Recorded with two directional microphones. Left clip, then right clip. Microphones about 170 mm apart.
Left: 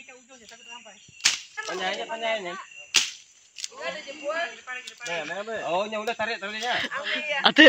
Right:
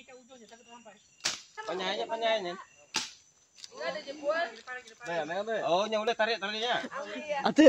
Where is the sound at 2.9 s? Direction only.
55° right (ahead or behind).